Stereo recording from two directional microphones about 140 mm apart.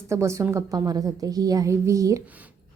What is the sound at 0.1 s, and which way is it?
A woman's voice, 20° right (ahead or behind).